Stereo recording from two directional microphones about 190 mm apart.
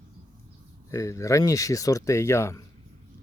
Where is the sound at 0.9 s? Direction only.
15° left (ahead or behind).